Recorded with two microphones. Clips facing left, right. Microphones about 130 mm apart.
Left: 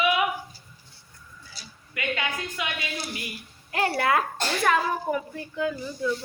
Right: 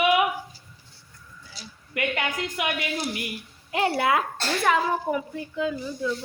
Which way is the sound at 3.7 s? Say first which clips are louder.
Right 1 dB; 15° right (ahead or behind).